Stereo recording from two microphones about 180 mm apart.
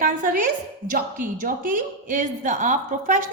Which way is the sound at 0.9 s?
50° right (ahead or behind).